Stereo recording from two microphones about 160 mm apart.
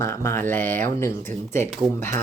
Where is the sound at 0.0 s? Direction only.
15° left (ahead or behind).